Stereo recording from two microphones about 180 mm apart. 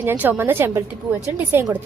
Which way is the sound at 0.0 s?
10° right (ahead or behind).